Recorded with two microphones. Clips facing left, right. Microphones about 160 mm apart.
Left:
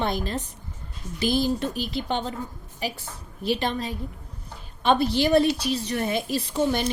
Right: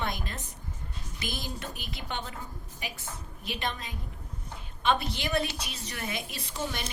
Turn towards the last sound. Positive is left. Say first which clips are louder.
# left 12 dB
turn(degrees=35)  # may be behind; listen again after turning